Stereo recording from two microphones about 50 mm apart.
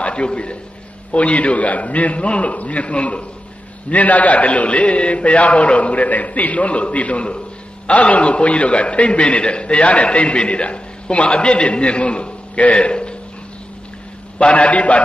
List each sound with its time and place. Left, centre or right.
0.0 s a man's voice: left
14.4 s a man's voice: left